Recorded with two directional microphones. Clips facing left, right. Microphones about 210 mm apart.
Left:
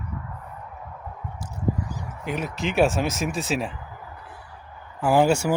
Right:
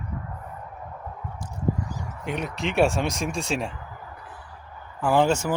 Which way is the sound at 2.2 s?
Centre (ahead or behind).